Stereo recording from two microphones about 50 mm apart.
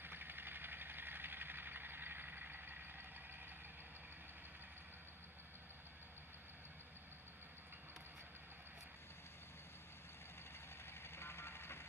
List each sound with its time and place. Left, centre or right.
0.0 s vehicle: right
11.0 s vehicle: left